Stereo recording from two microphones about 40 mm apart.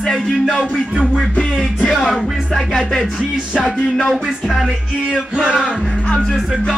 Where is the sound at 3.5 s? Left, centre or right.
Left.